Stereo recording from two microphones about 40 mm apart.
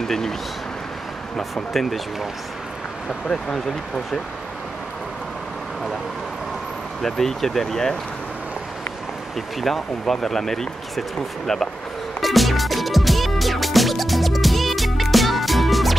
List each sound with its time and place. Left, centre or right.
0.0 s speech: centre
1.5 s speech: centre
3.5 s speech: centre
7.0 s speech: centre
9.6 s speech: centre
12.2 s music: centre